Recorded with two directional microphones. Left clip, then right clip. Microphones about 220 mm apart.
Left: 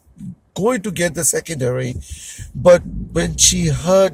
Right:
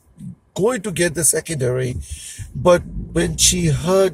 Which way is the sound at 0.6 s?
20° left (ahead or behind).